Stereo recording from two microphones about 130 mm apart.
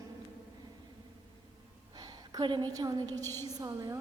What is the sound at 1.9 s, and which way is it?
A woman's voice, 30° right (ahead or behind).